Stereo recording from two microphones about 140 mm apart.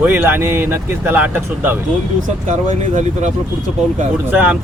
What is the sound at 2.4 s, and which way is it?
Speech, 60° right (ahead or behind).